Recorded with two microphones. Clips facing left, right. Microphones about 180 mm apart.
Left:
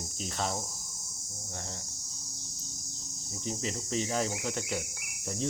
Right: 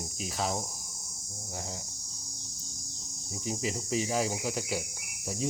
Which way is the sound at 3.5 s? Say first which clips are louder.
Right 2 dB; 10° right (ahead or behind).